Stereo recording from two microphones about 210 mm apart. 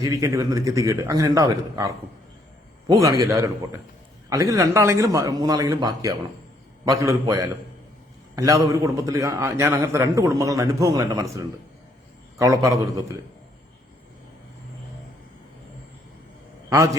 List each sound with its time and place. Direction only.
0.0 s a man's voice: 15° right (ahead or behind)
16.6 s a man's voice: 15° right (ahead or behind)